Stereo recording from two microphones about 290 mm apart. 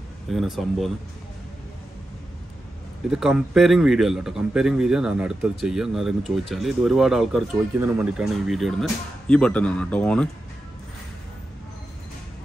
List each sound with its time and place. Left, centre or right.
0.3 s speech: centre
3.1 s speech: centre